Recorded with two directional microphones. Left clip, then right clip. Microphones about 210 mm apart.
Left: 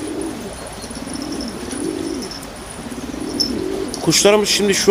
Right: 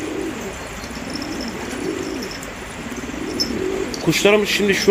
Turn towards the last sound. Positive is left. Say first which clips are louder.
# left 1 dB
turn(degrees=10)  # may be behind; listen again after turning